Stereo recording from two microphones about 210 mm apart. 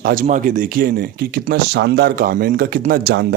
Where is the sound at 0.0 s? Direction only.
40° right (ahead or behind).